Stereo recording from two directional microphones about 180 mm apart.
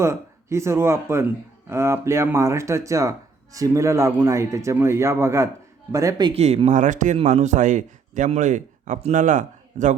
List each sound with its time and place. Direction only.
0.0 s speech: 15° right (ahead or behind)
6.3 s speech: 35° right (ahead or behind)